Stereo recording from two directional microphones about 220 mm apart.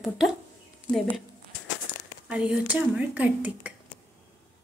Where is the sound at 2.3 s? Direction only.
5° right (ahead or behind).